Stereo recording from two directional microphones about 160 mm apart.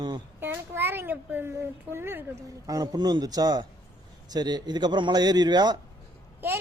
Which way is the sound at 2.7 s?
25° right (ahead or behind).